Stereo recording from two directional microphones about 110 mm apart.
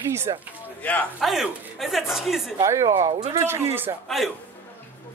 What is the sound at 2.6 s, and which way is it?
Speech, 25° right (ahead or behind).